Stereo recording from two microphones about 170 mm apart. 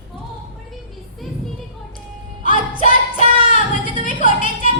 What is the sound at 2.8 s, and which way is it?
Child singing, 50° left (ahead or behind).